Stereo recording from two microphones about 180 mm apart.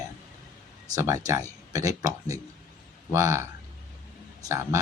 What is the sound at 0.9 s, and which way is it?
Speech, 15° right (ahead or behind).